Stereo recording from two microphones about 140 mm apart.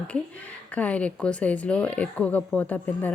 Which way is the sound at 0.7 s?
10° left (ahead or behind).